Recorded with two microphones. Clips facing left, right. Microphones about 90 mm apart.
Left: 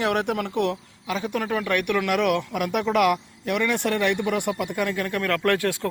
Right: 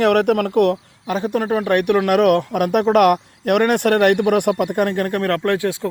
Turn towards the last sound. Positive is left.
turn(degrees=-20)  # may be behind; listen again after turning